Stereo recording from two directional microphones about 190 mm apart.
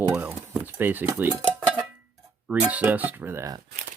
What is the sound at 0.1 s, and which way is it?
Cutlery, 10° right (ahead or behind).